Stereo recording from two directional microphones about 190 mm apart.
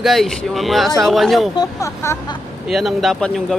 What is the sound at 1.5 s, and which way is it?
Speech, 20° left (ahead or behind).